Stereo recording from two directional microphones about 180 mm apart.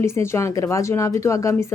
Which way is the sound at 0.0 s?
15° left (ahead or behind).